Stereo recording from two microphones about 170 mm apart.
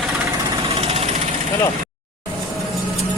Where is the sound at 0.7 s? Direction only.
40° right (ahead or behind).